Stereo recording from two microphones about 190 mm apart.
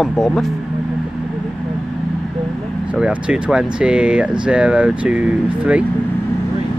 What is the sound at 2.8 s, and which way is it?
Speech, 5° right (ahead or behind).